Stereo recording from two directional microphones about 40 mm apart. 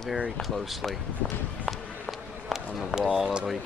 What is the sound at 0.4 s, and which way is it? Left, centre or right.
Speech, centre.